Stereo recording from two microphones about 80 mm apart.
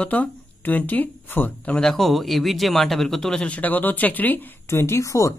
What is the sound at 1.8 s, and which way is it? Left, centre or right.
Speech, centre.